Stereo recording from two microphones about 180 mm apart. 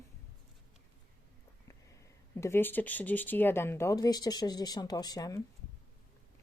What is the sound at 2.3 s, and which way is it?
Speech, 15° left (ahead or behind).